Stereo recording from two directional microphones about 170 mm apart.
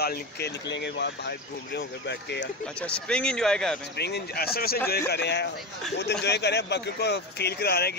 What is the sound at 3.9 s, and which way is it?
Speech, 75° left (ahead or behind).